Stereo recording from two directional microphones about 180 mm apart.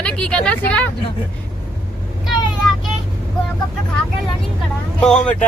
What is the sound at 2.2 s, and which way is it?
Vehicle, centre (ahead or behind).